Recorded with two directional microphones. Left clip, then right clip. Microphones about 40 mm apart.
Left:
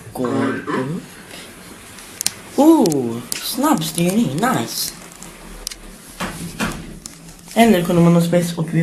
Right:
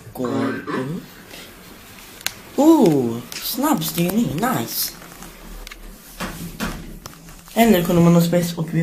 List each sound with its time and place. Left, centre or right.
0.1 s speech: centre
2.5 s speech: centre
6.1 s a sound: centre
7.5 s speech: centre